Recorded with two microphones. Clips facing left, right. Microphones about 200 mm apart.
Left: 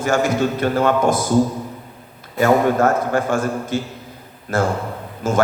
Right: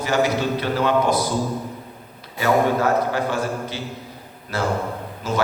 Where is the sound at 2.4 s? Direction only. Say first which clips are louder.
Left 4 dB; 50° left (ahead or behind).